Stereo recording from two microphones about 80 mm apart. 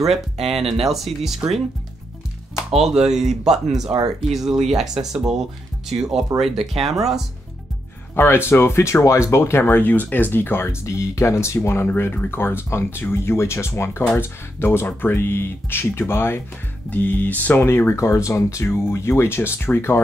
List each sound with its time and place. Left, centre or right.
0.0 s speech: centre
2.7 s speech: centre
8.2 s speech: left
11.9 s speech: left
17.6 s speech: left